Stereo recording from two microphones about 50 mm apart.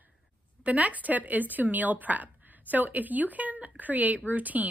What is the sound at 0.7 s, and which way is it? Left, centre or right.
A woman's voice, right.